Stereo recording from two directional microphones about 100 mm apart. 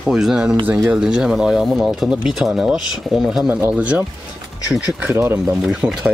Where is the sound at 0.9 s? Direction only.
10° right (ahead or behind).